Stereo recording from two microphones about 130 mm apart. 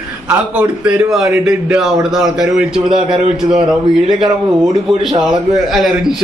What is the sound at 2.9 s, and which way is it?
Speech, 40° right (ahead or behind).